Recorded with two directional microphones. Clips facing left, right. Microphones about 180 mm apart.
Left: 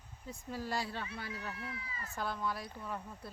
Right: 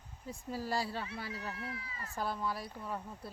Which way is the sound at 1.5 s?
70° right (ahead or behind).